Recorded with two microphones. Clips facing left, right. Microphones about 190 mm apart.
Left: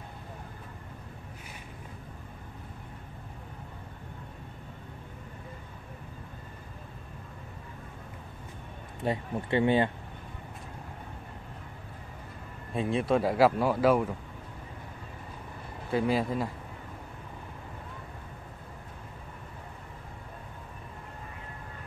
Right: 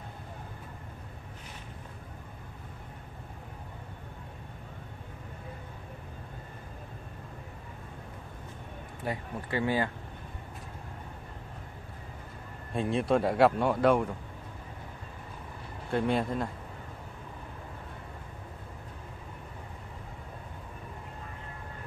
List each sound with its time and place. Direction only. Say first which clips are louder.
9.0 s speech: left 5 dB; 25° left (ahead or behind)
12.7 s speech: even; centre (ahead or behind)
15.9 s speech: left 1 dB; centre (ahead or behind)